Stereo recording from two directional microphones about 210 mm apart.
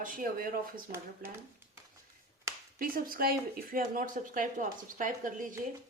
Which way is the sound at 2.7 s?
40° right (ahead or behind).